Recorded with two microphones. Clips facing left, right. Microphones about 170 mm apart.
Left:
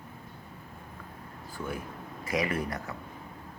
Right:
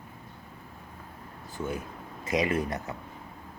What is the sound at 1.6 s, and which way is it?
Speech, 20° right (ahead or behind).